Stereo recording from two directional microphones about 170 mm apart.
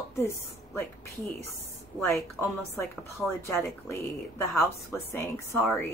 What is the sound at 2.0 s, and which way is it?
Speech, 10° left (ahead or behind).